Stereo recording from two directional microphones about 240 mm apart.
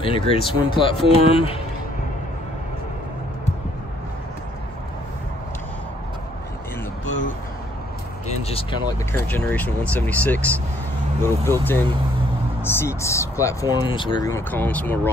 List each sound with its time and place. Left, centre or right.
0.0 s speech: left
8.3 s a sound: left
9.1 s speech: centre